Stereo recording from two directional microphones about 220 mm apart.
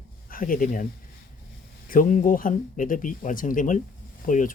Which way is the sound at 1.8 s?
40° left (ahead or behind).